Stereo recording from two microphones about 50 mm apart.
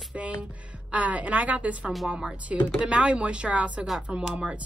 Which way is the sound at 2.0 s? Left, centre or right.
Centre.